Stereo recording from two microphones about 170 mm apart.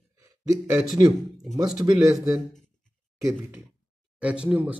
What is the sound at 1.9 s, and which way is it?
Speech, 20° right (ahead or behind).